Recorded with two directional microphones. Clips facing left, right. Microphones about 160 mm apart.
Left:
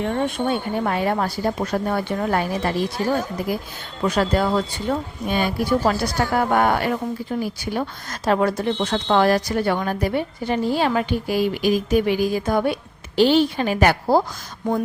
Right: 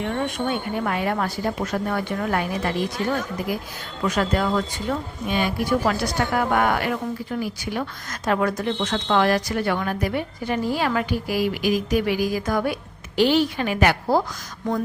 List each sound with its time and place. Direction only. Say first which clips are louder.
0.0 s a woman's voice: left 3 dB; 30° left (ahead or behind)